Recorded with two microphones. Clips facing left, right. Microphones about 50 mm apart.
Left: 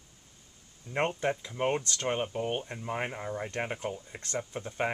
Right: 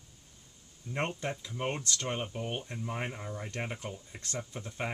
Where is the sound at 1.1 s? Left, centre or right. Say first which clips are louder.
Left 6 dB; left.